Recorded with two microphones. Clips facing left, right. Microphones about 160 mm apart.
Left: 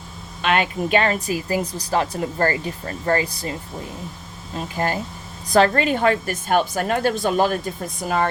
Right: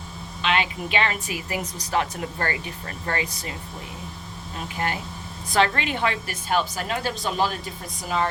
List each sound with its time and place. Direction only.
0.4 s speech: 50° left (ahead or behind)
4.5 s a woman's voice: 35° left (ahead or behind); by 8.3 s 50° left (ahead or behind)